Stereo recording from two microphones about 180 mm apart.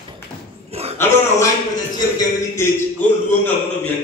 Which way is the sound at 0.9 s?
10° left (ahead or behind).